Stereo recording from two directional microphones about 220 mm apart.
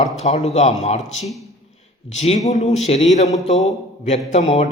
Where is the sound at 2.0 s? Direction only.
30° left (ahead or behind).